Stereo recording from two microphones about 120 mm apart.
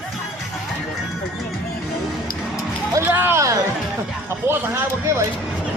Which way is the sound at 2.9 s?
15° right (ahead or behind).